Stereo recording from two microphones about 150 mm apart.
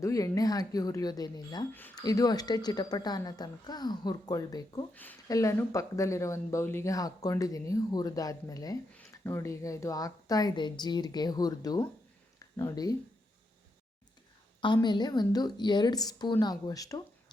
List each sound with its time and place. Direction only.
0.0 s speech: 20° left (ahead or behind)
8.9 s speech: 10° left (ahead or behind)
14.6 s speech: 30° left (ahead or behind)